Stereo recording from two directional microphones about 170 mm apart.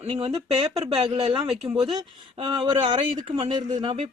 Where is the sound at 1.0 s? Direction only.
35° right (ahead or behind).